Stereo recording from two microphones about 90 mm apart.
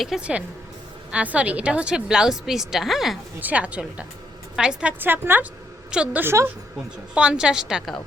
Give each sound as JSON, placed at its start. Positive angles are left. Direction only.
{"t": 0.2, "sound": "a woman's voice", "side_deg": -10}
{"t": 3.4, "sound": "a woman's voice", "side_deg": -15}
{"t": 5.9, "sound": "a woman's voice", "side_deg": -10}
{"t": 6.2, "sound": "a woman's voice", "side_deg": -30}
{"t": 7.1, "sound": "a woman's voice", "side_deg": -10}